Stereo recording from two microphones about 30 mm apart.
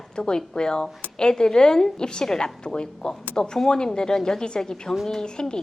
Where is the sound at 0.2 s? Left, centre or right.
Left.